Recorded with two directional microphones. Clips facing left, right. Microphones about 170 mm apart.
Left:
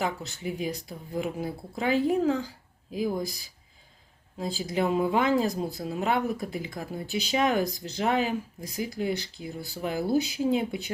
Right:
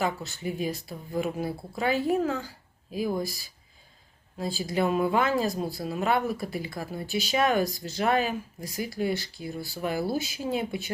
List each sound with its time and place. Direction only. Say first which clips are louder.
0.0 s speech: right 1 dB; 20° left (ahead or behind)
4.4 s speech: right 1 dB; 20° left (ahead or behind)